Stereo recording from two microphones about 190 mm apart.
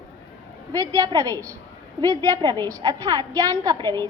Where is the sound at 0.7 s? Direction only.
20° right (ahead or behind).